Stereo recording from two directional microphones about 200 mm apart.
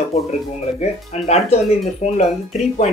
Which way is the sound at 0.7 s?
35° left (ahead or behind).